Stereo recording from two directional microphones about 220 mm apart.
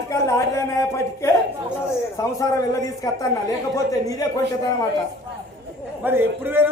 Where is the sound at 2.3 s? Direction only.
15° left (ahead or behind).